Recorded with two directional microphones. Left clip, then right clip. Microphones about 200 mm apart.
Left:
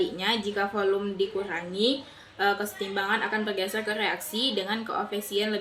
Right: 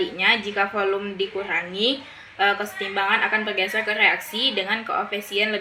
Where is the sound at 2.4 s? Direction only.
30° left (ahead or behind).